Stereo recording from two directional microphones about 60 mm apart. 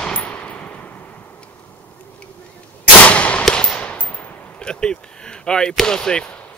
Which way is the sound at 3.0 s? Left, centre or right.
Left.